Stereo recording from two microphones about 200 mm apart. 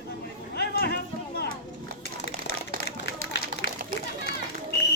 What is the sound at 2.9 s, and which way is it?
Run, 60° left (ahead or behind).